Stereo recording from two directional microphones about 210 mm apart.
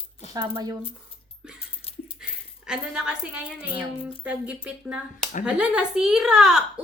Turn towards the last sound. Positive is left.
turn(degrees=-5)  # may be behind; listen again after turning